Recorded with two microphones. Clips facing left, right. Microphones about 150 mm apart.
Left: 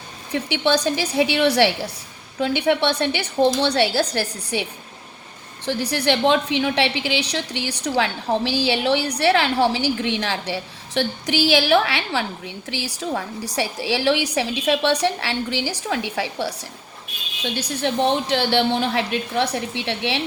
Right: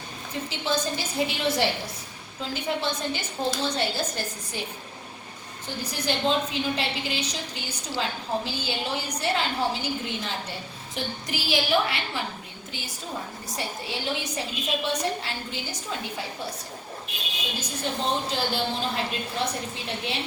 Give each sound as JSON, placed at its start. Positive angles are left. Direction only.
{"t": 0.3, "sound": "a woman's voice", "side_deg": 75}
{"t": 5.6, "sound": "a woman's voice", "side_deg": 75}
{"t": 17.5, "sound": "a woman's voice", "side_deg": 70}